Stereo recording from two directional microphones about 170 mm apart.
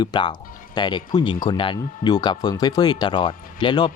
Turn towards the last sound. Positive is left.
turn(degrees=30)  # may be behind; listen again after turning